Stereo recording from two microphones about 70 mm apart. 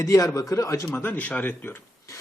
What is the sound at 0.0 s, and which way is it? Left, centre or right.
A man's voice, left.